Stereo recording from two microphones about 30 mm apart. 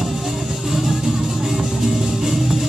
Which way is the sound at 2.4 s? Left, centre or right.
Centre.